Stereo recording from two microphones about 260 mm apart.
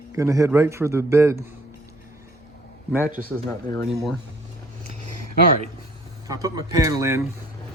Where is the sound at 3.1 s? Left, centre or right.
Right.